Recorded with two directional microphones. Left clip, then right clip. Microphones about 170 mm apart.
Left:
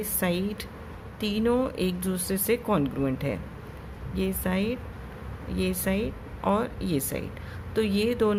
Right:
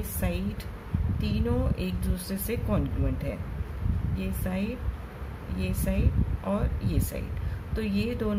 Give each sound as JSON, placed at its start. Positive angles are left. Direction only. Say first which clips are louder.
{"t": 0.2, "sound": "speech", "louder": "left 5 dB", "side_deg": 45}